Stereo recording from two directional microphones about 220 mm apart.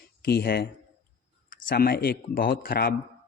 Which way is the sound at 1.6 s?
45° left (ahead or behind).